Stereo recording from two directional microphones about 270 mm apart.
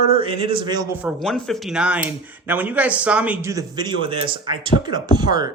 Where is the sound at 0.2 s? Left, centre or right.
Centre.